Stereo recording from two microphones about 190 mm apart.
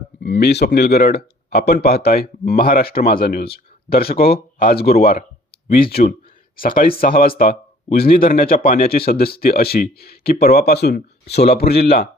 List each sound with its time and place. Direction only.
0.2 s speech: 60° left (ahead or behind)